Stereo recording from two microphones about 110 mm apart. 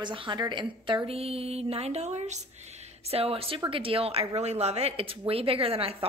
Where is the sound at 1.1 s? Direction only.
65° right (ahead or behind); by 2.4 s 90° right.